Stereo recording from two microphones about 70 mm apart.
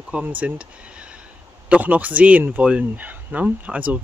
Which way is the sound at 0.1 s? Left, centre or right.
Right.